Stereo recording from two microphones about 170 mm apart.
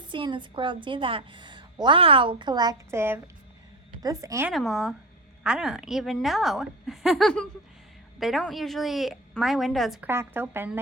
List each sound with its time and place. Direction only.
0.1 s a woman's voice: 30° right (ahead or behind)
4.4 s a woman's voice: centre (ahead or behind)
10.1 s a woman's voice: 15° right (ahead or behind)